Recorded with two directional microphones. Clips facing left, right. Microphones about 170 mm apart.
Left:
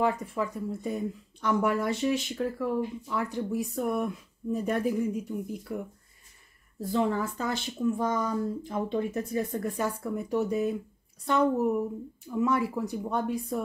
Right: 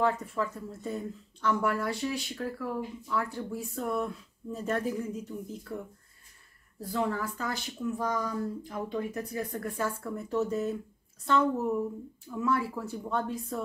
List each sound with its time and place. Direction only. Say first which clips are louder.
0.0 s speech: left 1 dB; 15° left (ahead or behind)
6.8 s speech: left 4 dB; 25° left (ahead or behind)